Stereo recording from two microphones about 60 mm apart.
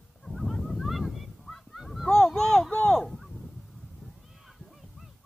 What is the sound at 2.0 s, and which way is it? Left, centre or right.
Honk, centre.